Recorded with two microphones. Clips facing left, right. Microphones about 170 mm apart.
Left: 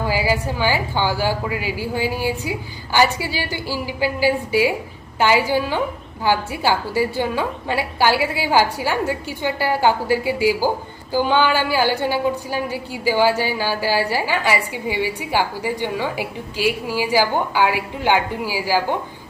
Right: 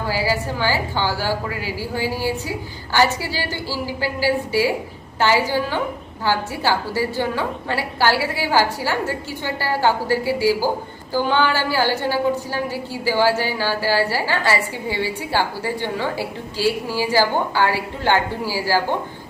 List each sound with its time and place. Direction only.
0.1 s a woman's voice: 15° left (ahead or behind)